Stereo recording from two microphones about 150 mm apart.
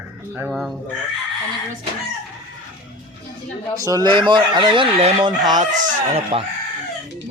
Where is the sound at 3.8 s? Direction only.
25° right (ahead or behind); by 6.4 s 45° right (ahead or behind).